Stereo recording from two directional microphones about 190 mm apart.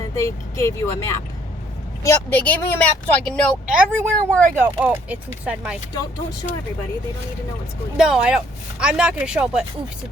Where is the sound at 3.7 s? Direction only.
10° right (ahead or behind).